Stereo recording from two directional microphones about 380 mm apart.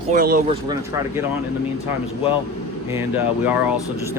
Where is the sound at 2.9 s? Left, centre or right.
Centre.